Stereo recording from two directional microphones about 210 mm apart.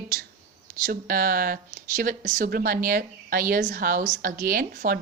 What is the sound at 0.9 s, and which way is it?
A woman's voice, 40° right (ahead or behind).